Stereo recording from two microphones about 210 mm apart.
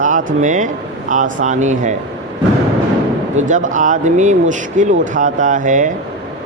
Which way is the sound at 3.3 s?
35° right (ahead or behind).